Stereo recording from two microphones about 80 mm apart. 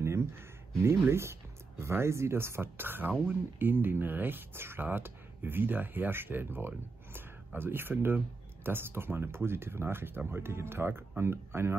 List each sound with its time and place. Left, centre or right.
0.0 s speech: right